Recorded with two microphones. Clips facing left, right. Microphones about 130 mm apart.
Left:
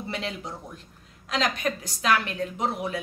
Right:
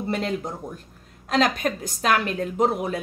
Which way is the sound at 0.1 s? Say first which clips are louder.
Right 7 dB; 45° right (ahead or behind).